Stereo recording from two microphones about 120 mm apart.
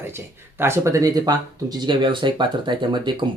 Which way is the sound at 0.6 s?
25° right (ahead or behind).